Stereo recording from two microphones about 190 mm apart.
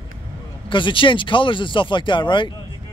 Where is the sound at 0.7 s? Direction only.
25° left (ahead or behind).